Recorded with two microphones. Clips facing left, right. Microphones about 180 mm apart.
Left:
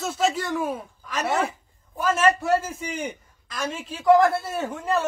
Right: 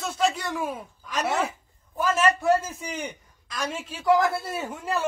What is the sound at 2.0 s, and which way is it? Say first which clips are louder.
Speech: left 2 dB; centre (ahead or behind).